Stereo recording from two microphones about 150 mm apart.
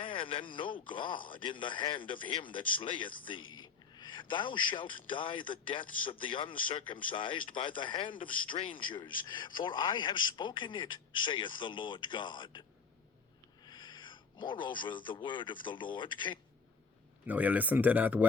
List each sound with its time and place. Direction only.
0.0 s a sound: 35° left (ahead or behind)
0.5 s a man's voice: 35° left (ahead or behind)
13.7 s speech: 30° left (ahead or behind)
17.2 s speech: 10° right (ahead or behind)